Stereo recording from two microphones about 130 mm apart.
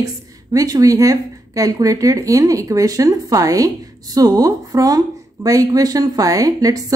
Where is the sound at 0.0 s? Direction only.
25° right (ahead or behind).